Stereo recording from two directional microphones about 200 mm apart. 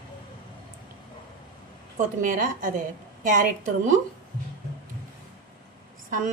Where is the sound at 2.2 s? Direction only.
40° right (ahead or behind).